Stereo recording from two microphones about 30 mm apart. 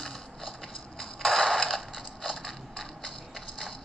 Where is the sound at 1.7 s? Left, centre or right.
Centre.